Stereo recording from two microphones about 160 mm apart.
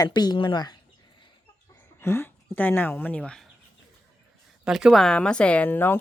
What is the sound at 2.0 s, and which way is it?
Speech, 15° left (ahead or behind).